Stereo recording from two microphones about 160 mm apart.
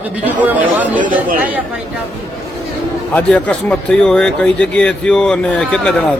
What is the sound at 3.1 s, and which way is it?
Speech, 10° left (ahead or behind).